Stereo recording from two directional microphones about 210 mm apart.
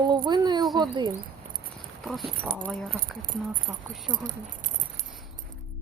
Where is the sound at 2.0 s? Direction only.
Centre (ahead or behind).